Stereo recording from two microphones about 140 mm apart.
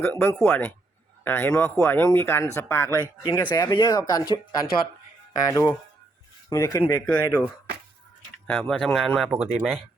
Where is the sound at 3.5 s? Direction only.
30° left (ahead or behind).